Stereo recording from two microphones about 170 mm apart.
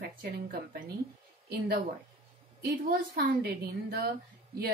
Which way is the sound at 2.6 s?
65° right (ahead or behind).